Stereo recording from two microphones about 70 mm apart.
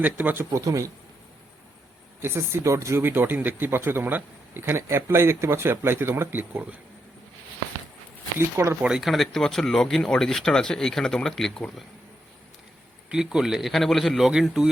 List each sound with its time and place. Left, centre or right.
0.0 s a man's voice: right
0.5 s a man's voice: right
2.2 s speech: right
3.0 s speech: right
8.4 s speech: right
8.8 s speech: centre
13.1 s speech: centre